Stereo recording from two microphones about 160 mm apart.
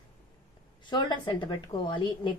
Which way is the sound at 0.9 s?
30° left (ahead or behind).